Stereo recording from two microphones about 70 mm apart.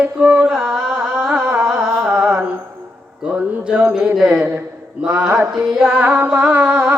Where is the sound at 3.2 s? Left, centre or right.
Centre.